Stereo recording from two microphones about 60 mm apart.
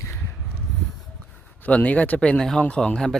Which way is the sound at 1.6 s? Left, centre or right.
Left.